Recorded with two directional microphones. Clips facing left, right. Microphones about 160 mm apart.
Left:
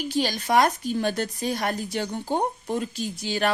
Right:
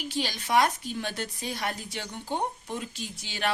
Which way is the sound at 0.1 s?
45° left (ahead or behind).